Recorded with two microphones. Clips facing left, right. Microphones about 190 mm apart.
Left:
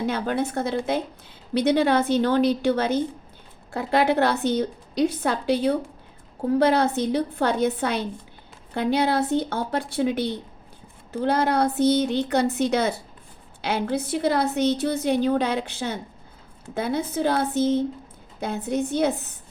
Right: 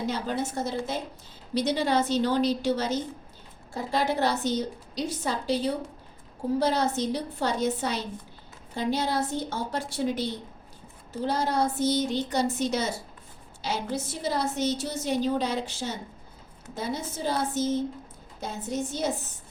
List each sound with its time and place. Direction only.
0.0 s a woman's voice: 60° left (ahead or behind)